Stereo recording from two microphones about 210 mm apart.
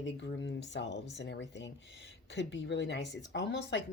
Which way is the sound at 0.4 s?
55° left (ahead or behind).